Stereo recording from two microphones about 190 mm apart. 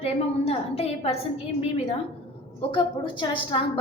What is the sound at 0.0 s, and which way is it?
A woman's voice, 30° left (ahead or behind).